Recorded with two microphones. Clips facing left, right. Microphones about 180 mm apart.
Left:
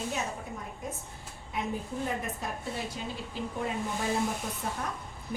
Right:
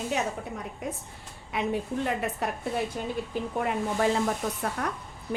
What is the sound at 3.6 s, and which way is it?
A woman's voice, 65° right (ahead or behind).